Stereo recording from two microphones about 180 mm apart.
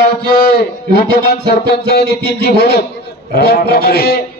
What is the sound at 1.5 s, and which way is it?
A man's voice, 60° left (ahead or behind).